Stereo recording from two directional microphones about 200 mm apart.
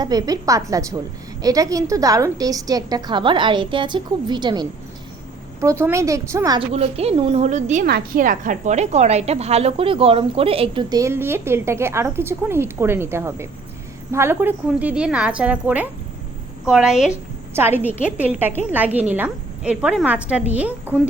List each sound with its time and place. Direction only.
0.0 s a woman's voice: 20° right (ahead or behind)
6.7 s a woman's voice: 30° right (ahead or behind)
7.9 s a woman's voice: 50° right (ahead or behind); by 21.1 s 5° right (ahead or behind)